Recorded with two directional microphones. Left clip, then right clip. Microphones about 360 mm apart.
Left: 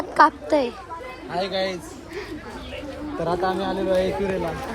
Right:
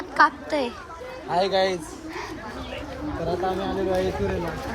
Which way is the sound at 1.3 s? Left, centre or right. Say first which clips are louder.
Right 4 dB; right.